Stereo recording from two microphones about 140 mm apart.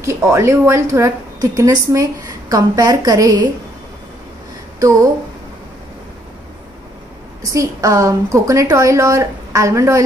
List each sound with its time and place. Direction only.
0.0 s a woman's voice: 20° right (ahead or behind)
4.7 s a woman's voice: 25° right (ahead or behind)
7.4 s a woman's voice: 25° right (ahead or behind)